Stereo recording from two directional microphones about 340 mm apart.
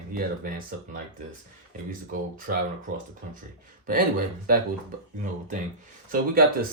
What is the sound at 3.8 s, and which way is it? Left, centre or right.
Speech, right.